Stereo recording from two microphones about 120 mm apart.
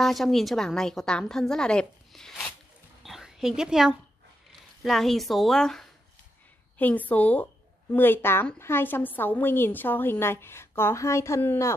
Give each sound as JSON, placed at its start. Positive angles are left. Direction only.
{"t": 0.0, "sound": "a woman's voice", "side_deg": 0}
{"t": 3.0, "sound": "a sound", "side_deg": 0}
{"t": 4.8, "sound": "a woman's voice", "side_deg": 0}